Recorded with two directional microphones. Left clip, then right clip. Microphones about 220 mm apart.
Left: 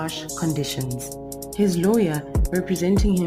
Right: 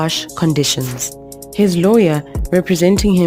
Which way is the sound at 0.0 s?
45° right (ahead or behind).